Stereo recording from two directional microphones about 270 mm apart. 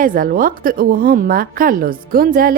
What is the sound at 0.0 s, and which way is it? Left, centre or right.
A woman's voice, right.